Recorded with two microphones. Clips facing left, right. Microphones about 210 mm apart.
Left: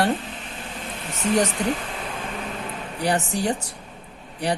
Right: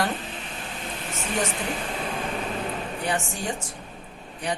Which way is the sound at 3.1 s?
40° left (ahead or behind).